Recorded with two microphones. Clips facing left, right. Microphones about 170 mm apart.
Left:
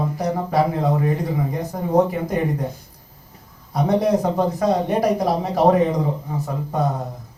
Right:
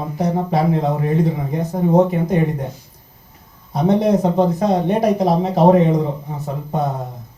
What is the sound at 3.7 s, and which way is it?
Speech, 25° right (ahead or behind).